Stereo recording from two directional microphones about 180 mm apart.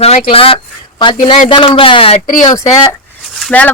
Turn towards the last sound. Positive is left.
turn(degrees=10)  # may be behind; listen again after turning